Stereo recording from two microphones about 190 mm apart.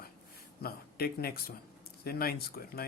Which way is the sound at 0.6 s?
55° left (ahead or behind).